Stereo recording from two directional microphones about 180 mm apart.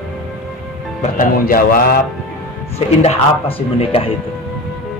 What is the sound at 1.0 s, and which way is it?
Speech, 50° left (ahead or behind).